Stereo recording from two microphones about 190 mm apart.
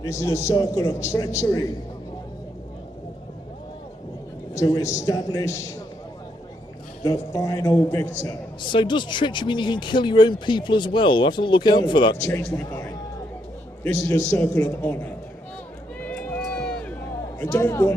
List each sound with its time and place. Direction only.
0.0 s a man's voice: 15° left (ahead or behind)
4.5 s a man's voice: 15° left (ahead or behind)
7.0 s a man's voice: 20° left (ahead or behind)
16.0 s run: 10° left (ahead or behind)
17.4 s a man's voice: 10° left (ahead or behind)